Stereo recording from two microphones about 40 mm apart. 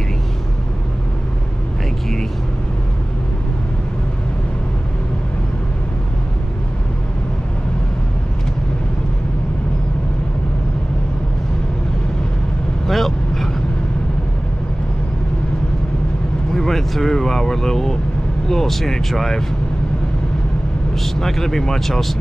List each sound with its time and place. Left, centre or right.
12.8 s vehicle: centre
16.5 s a sound: centre
17.1 s vehicle: centre
18.5 s speech: centre
20.9 s speech: centre